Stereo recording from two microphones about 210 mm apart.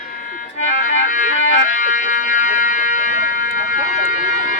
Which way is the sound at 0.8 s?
35° left (ahead or behind).